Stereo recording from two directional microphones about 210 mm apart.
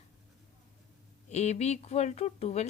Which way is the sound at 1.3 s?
30° left (ahead or behind).